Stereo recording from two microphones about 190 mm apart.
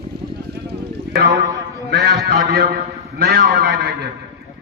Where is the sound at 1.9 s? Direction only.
60° right (ahead or behind).